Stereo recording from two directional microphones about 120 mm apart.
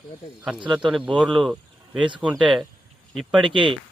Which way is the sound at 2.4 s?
5° right (ahead or behind).